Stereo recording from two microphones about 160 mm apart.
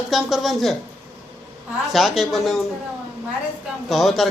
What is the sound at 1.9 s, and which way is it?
Speech, centre (ahead or behind).